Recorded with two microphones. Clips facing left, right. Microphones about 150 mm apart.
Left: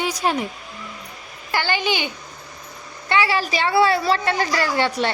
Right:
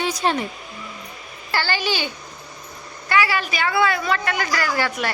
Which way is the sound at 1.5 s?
20° left (ahead or behind).